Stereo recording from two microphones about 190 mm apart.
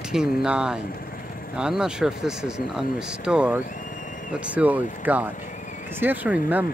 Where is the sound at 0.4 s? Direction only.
5° right (ahead or behind).